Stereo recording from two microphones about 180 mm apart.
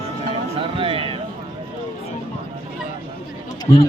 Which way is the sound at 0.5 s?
30° right (ahead or behind).